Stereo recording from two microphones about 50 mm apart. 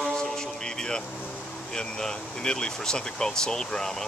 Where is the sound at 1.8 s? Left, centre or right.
Centre.